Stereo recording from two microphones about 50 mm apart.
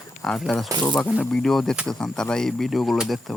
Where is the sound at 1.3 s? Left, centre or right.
Centre.